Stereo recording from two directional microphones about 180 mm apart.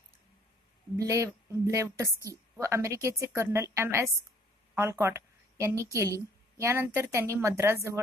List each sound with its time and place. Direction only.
0.9 s a woman's voice: 20° right (ahead or behind)